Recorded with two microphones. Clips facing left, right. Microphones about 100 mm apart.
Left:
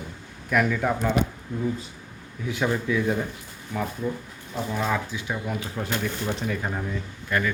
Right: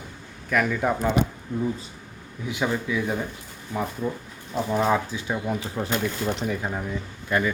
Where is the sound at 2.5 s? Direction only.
10° right (ahead or behind).